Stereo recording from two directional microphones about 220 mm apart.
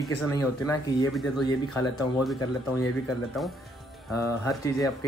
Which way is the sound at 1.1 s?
Centre (ahead or behind).